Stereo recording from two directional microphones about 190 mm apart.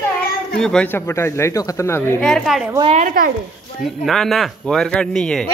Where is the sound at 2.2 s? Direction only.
Centre (ahead or behind).